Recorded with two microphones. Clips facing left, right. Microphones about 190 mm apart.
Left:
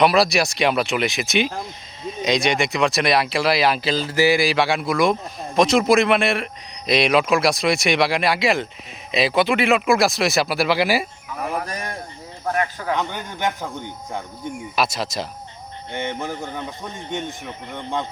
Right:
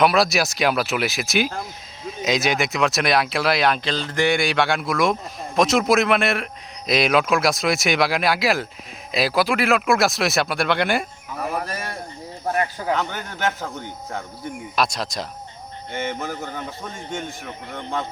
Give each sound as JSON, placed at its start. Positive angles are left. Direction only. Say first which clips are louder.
{"t": 0.0, "sound": "speech", "louder": "left 1 dB", "side_deg": 0}
{"t": 13.0, "sound": "speech", "louder": "left 1 dB", "side_deg": 15}
{"t": 14.8, "sound": "speech", "louder": "even", "side_deg": 0}
{"t": 15.9, "sound": "speech", "louder": "even", "side_deg": 15}